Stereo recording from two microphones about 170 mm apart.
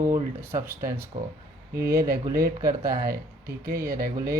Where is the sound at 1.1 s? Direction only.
35° right (ahead or behind).